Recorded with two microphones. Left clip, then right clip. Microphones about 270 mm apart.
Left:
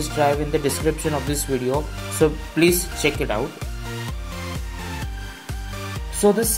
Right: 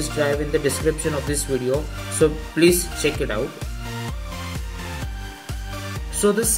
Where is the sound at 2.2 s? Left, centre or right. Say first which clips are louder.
Right 1 dB; centre.